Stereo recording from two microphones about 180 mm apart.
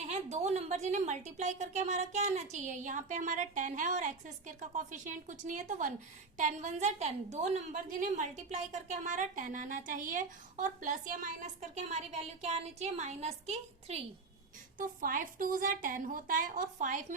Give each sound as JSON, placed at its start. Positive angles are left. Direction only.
{"t": 0.1, "sound": "a woman's voice", "side_deg": -40}
{"t": 14.8, "sound": "a woman's voice", "side_deg": -50}